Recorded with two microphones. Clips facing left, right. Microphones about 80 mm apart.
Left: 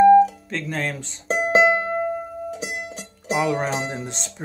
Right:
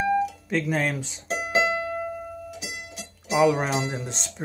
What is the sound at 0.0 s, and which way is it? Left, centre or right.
Music, left.